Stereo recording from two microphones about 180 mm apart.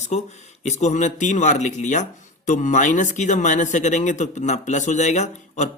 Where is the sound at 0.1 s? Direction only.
40° left (ahead or behind).